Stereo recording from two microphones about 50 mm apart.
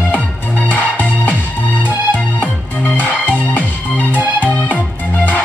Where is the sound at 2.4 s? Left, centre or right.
Left.